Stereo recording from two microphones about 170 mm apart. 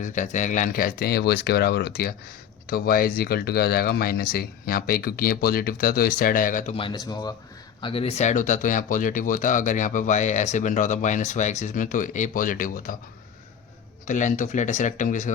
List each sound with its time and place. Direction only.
0.0 s speech: 45° left (ahead or behind)
6.7 s speech: 25° left (ahead or behind); by 13.0 s 55° left (ahead or behind)
14.1 s speech: 45° left (ahead or behind)